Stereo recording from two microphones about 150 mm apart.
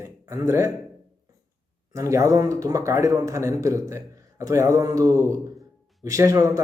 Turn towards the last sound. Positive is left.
turn(degrees=-20)  # may be behind; listen again after turning